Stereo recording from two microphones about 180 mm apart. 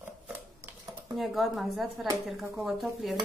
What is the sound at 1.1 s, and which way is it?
A woman's voice, centre (ahead or behind).